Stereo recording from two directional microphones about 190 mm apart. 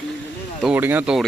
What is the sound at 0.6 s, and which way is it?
Speech, 10° right (ahead or behind).